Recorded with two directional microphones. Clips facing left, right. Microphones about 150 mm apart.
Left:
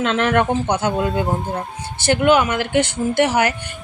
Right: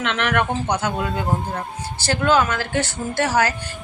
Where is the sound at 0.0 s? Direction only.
30° left (ahead or behind).